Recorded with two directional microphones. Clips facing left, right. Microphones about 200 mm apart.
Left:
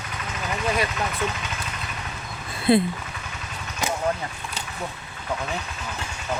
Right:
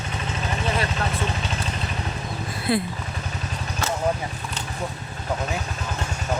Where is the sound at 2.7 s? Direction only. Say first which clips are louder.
Left 5 dB; 25° left (ahead or behind).